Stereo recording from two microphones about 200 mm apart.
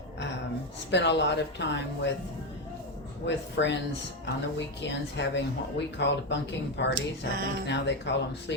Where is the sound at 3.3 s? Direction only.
60° left (ahead or behind).